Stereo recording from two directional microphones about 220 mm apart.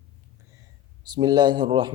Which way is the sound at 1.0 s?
20° right (ahead or behind).